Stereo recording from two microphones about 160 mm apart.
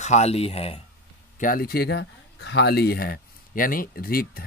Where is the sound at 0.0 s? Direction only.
45° left (ahead or behind).